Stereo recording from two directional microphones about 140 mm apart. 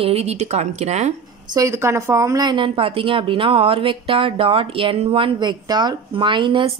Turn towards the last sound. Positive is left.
turn(degrees=-35)  # may be behind; listen again after turning